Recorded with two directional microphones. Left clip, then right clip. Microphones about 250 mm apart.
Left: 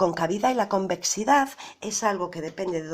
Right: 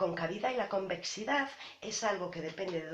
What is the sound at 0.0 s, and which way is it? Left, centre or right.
Speech, left.